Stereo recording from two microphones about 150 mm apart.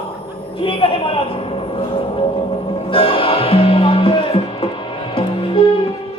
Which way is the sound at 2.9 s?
35° left (ahead or behind).